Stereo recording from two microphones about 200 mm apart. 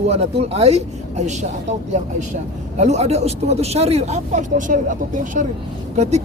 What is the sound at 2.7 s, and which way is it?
Speech, 35° right (ahead or behind).